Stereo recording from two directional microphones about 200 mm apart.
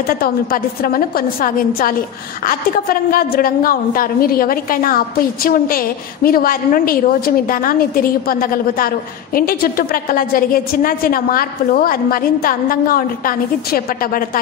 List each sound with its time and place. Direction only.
0.0 s a woman's voice: 50° left (ahead or behind)